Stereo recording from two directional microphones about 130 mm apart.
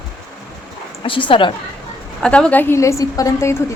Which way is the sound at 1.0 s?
40° left (ahead or behind).